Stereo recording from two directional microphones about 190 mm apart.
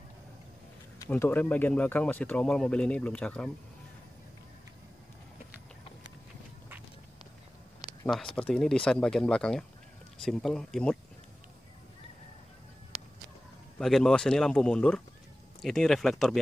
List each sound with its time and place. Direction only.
1.1 s speech: 10° left (ahead or behind)
8.4 s speech: 5° left (ahead or behind)
13.7 s speech: centre (ahead or behind)